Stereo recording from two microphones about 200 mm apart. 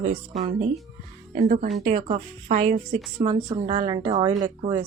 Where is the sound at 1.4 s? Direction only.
40° right (ahead or behind).